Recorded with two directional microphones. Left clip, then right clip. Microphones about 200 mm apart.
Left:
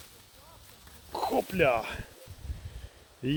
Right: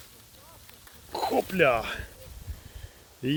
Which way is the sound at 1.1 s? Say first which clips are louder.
Right 2 dB; 5° right (ahead or behind).